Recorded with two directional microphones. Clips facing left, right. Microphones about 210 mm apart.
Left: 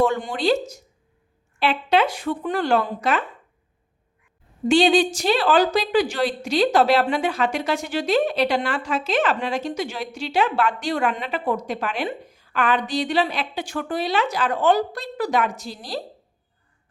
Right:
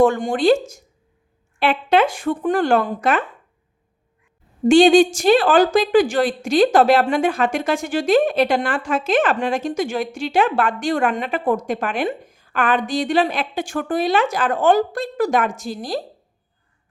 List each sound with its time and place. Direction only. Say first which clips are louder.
0.0 s a woman's voice: right 5 dB; 50° right (ahead or behind)
4.7 s a woman's voice: right 6 dB; 50° right (ahead or behind)